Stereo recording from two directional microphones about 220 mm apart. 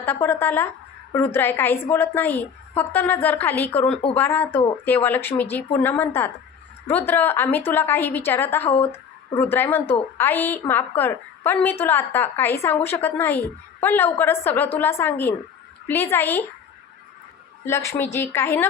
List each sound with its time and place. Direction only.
0.0 s a woman's voice: 10° left (ahead or behind)
17.7 s a woman's voice: 10° left (ahead or behind)